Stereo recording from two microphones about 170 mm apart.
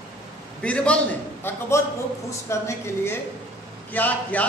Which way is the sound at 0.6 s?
5° left (ahead or behind).